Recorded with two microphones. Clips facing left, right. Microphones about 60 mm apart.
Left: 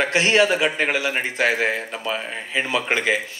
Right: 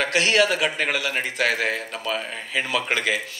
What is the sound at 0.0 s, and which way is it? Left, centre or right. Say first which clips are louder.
Speech: left 2 dB; left.